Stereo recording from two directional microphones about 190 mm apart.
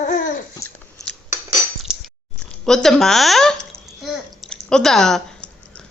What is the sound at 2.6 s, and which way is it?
Babbling, centre (ahead or behind).